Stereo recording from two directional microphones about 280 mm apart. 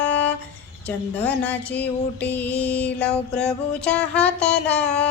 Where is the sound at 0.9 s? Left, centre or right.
Centre.